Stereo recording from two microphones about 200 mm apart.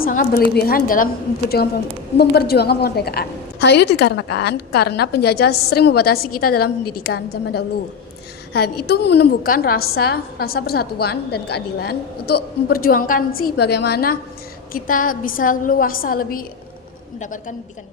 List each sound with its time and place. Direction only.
0.0 s a woman's voice: 45° left (ahead or behind)